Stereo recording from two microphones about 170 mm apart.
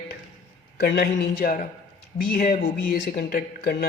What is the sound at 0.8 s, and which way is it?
A man's voice, 75° left (ahead or behind).